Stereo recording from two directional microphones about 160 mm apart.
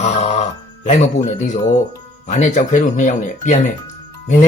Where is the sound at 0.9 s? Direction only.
50° left (ahead or behind).